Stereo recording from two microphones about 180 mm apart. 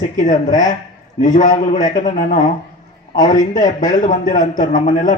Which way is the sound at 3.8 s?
45° left (ahead or behind).